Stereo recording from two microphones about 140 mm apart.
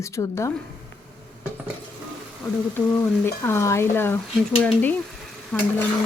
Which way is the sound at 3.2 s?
15° left (ahead or behind).